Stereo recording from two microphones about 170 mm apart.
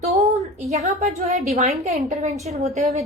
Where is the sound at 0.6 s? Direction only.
40° right (ahead or behind).